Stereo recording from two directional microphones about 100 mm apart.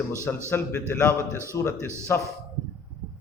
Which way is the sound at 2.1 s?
20° left (ahead or behind).